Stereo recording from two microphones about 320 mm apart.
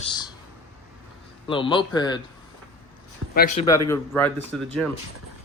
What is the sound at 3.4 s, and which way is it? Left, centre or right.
Speech, left.